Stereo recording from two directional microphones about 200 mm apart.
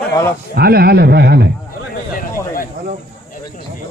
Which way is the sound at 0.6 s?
50° right (ahead or behind).